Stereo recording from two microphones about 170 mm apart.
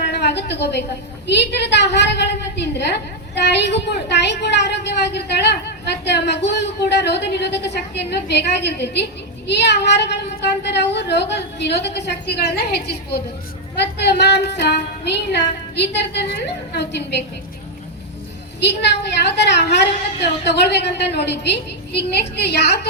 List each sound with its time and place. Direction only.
0.1 s a woman's voice: 75° left (ahead or behind)
18.6 s a woman's voice: 80° left